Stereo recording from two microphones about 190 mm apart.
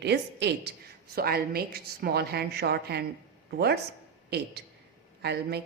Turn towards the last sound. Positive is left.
turn(degrees=-60)  # may be behind; listen again after turning